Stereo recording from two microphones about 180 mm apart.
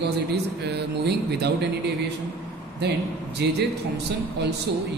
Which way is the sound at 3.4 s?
70° right (ahead or behind).